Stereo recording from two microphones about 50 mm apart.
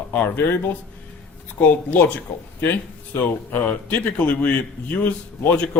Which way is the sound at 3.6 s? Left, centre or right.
Left.